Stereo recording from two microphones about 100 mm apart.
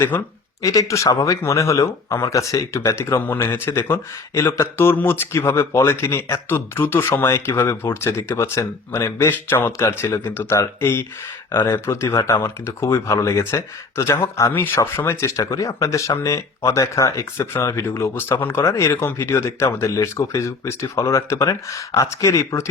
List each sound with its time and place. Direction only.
0.1 s speech: 25° left (ahead or behind)
0.6 s speech: 35° left (ahead or behind)